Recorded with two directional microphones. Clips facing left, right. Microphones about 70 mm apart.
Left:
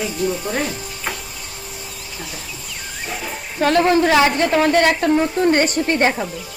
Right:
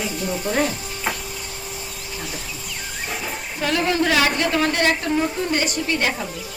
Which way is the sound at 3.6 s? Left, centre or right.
Left.